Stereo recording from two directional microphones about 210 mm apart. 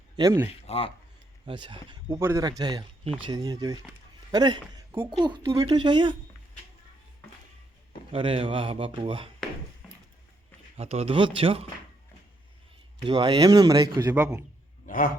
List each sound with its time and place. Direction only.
0.2 s speech: 15° right (ahead or behind)
0.7 s speech: 25° left (ahead or behind)
1.5 s a man's voice: 25° right (ahead or behind)
8.1 s speech: 25° right (ahead or behind)
9.8 s a sound: centre (ahead or behind)
10.8 s speech: 30° right (ahead or behind)
13.1 s speech: 20° right (ahead or behind)
14.8 s a sound: 40° left (ahead or behind)